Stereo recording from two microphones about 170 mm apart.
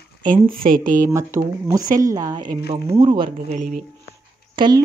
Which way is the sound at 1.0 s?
20° right (ahead or behind).